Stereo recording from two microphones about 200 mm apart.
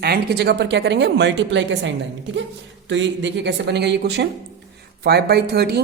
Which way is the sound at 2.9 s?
65° right (ahead or behind).